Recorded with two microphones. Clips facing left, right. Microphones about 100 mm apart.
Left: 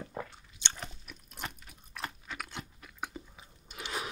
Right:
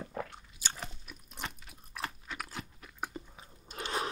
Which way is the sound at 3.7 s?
40° right (ahead or behind).